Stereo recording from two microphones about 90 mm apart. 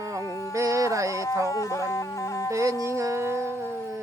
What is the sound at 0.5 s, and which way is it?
Music, 35° right (ahead or behind).